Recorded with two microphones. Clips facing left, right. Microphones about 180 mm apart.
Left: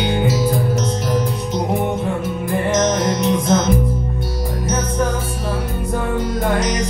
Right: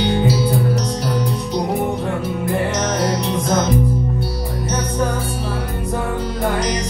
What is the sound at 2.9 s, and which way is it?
Music, 35° right (ahead or behind).